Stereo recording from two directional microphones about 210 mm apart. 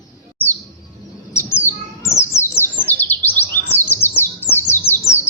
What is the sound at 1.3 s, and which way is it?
Bird, 10° left (ahead or behind).